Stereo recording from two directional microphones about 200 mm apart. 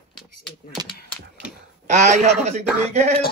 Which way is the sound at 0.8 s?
20° right (ahead or behind).